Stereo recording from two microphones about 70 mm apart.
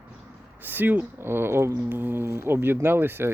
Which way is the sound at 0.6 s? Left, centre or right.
Right.